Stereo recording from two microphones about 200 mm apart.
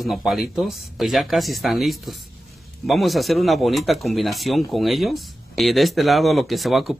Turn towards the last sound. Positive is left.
turn(degrees=0)  # may be behind; listen again after turning